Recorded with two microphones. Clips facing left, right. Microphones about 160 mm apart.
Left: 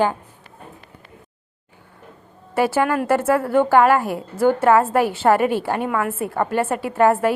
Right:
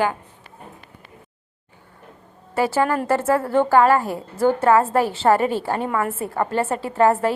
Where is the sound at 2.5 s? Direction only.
15° left (ahead or behind).